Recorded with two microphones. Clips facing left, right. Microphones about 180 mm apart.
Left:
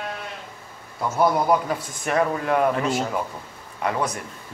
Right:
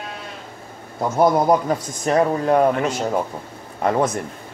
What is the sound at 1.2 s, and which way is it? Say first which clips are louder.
A man's voice: right 4 dB; 40° right (ahead or behind).